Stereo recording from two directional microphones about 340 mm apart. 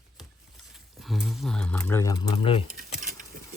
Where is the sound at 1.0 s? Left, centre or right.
Centre.